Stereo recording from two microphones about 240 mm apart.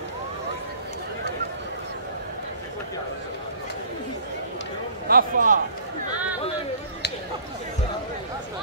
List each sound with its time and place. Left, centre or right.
5.0 s a man's voice: right